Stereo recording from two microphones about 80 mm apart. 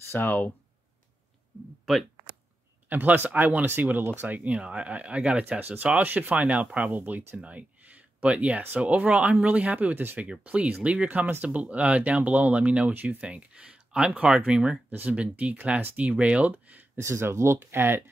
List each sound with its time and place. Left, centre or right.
0.1 s speech: left
2.9 s speech: right
17.0 s speech: right